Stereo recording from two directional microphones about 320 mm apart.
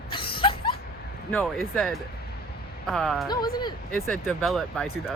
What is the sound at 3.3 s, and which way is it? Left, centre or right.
Speech, centre.